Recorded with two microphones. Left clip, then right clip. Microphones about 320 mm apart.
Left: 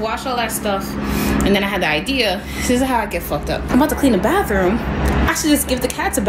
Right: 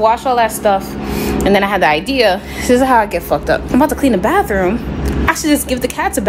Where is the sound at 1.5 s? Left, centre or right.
Centre.